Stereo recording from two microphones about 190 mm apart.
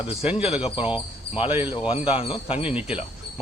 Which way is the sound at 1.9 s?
30° left (ahead or behind).